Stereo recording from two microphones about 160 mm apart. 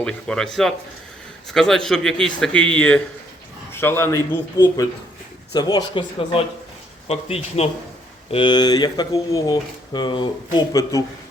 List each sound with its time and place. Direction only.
0.0 s a man's voice: 5° left (ahead or behind); by 11.0 s 25° left (ahead or behind)